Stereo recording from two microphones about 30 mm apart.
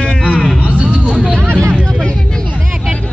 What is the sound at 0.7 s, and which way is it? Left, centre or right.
Music, right.